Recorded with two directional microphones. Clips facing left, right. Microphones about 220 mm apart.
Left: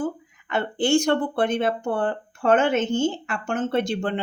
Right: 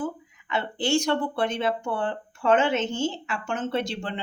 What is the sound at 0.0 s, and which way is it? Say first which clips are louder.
Speech: left 3 dB; 50° left (ahead or behind).